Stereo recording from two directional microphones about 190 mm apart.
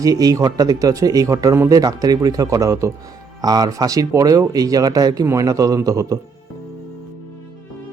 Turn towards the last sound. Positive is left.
turn(degrees=-20)  # may be behind; listen again after turning